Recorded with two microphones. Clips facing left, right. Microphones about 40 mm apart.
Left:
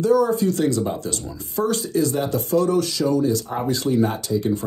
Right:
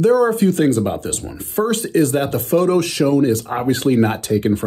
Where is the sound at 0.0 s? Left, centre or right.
Right.